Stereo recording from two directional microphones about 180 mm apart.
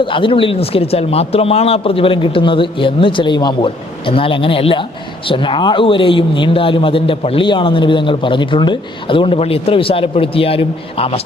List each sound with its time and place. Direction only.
0.0 s a man's voice: 30° left (ahead or behind)